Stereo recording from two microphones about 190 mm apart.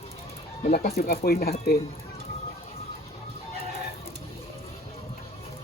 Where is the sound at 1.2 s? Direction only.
55° left (ahead or behind).